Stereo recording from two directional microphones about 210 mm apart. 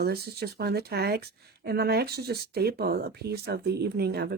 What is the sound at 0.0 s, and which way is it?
Speech, 50° right (ahead or behind).